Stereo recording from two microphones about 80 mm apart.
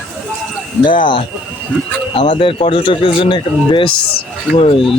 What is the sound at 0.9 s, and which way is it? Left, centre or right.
Speech, left.